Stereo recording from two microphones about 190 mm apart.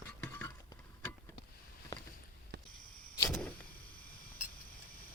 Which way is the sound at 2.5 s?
70° right (ahead or behind).